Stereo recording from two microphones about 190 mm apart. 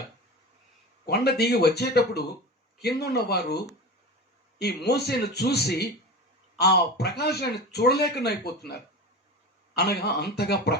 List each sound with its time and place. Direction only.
1.0 s speech: 60° left (ahead or behind)
4.6 s speech: 60° left (ahead or behind)
9.7 s speech: 55° left (ahead or behind)